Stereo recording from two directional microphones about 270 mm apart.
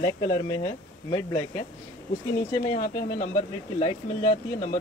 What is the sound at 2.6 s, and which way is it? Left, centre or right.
Speech, left.